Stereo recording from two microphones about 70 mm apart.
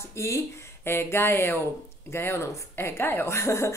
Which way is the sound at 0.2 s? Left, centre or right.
Left.